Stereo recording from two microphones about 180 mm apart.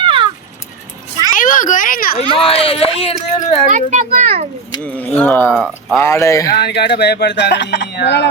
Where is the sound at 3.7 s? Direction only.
40° right (ahead or behind).